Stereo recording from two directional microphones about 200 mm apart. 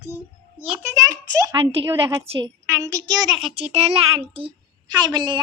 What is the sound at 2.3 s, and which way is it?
Speech, 30° right (ahead or behind).